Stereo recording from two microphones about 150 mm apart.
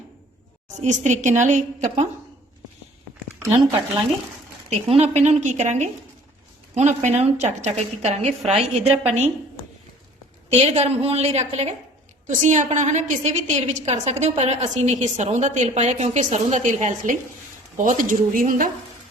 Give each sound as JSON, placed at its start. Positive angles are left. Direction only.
{"t": 0.7, "sound": "a woman's voice", "side_deg": -50}
{"t": 4.7, "sound": "a woman's voice", "side_deg": -45}
{"t": 10.5, "sound": "a woman's voice", "side_deg": -45}